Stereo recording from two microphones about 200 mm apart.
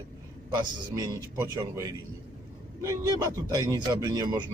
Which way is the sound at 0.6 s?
20° right (ahead or behind).